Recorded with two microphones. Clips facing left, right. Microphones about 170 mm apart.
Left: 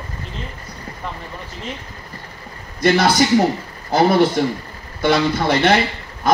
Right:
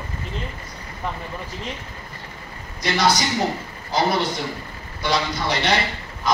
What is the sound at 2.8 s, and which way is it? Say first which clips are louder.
A man's voice: left 6 dB; 55° left (ahead or behind).